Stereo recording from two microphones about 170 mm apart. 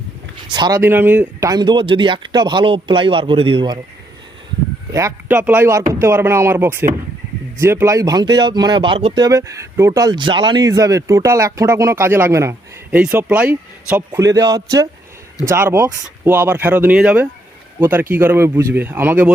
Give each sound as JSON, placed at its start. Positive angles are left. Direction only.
{"t": 0.5, "sound": "speech", "side_deg": -25}
{"t": 0.8, "sound": "speech", "side_deg": -10}
{"t": 4.9, "sound": "speech", "side_deg": -15}
{"t": 9.1, "sound": "speech", "side_deg": -20}